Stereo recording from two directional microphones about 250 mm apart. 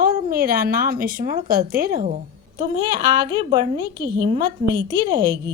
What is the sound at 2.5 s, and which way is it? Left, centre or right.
A woman's voice, centre.